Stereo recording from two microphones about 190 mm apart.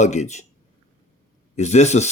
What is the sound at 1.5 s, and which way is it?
Speech, 35° left (ahead or behind).